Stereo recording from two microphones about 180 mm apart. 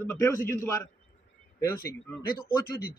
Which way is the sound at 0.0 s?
15° left (ahead or behind).